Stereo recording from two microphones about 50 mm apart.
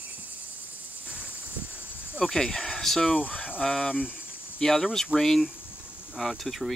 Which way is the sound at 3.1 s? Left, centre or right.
Left.